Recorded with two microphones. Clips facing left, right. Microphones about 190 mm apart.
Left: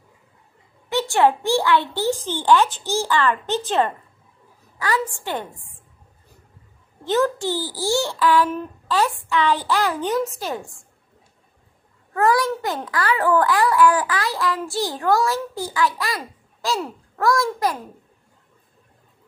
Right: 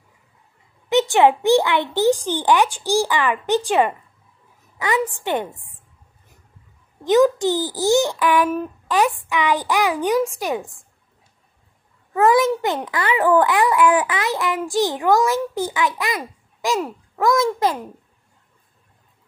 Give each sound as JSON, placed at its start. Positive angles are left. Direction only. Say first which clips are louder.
{"t": 0.8, "sound": "a child's voice", "louder": "right 3 dB", "side_deg": -20}
{"t": 7.1, "sound": "a child's voice", "louder": "right 5 dB", "side_deg": -15}
{"t": 12.1, "sound": "a child's voice", "louder": "right 4 dB", "side_deg": -20}